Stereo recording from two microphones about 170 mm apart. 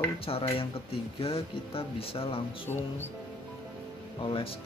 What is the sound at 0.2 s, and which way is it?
Speech, 35° left (ahead or behind).